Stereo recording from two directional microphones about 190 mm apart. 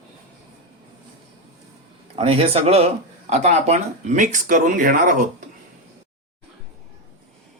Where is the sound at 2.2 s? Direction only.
30° right (ahead or behind); by 5.2 s 45° right (ahead or behind).